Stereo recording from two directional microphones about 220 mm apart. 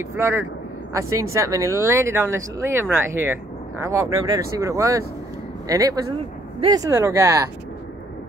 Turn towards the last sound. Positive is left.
turn(degrees=-15)  # may be behind; listen again after turning